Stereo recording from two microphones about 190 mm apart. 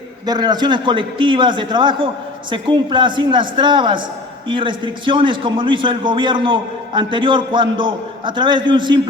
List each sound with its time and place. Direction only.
0.3 s a man's voice: 20° right (ahead or behind)